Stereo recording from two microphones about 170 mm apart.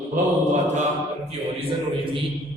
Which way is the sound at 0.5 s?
45° right (ahead or behind).